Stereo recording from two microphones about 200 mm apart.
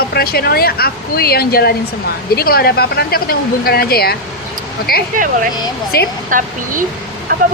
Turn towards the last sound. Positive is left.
turn(degrees=-45)  # may be behind; listen again after turning